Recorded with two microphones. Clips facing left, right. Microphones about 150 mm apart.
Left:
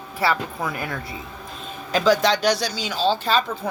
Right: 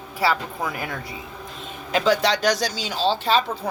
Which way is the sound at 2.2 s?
40° right (ahead or behind).